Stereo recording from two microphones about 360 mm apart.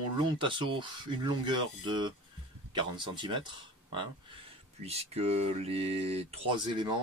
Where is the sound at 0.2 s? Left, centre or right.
Centre.